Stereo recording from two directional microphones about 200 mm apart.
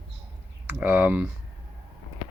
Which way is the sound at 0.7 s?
10° right (ahead or behind).